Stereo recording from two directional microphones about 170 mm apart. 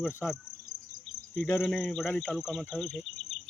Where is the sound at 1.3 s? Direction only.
15° left (ahead or behind).